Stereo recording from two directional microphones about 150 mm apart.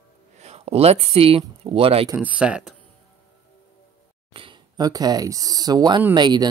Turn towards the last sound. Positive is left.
turn(degrees=-30)  # may be behind; listen again after turning